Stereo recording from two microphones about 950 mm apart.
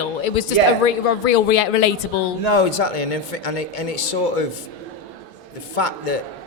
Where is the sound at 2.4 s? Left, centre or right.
Left.